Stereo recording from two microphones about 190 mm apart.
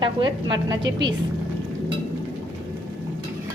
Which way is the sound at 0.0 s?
25° right (ahead or behind).